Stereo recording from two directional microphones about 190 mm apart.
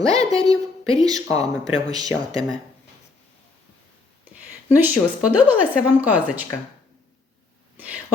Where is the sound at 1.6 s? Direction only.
20° right (ahead or behind).